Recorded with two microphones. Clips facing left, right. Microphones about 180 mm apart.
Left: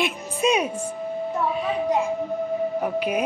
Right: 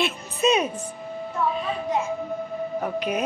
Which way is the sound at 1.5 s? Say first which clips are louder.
Left 3 dB; 15° left (ahead or behind).